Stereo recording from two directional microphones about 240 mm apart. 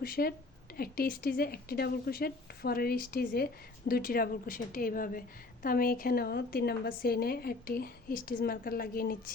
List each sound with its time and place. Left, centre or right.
0.0 s speech: left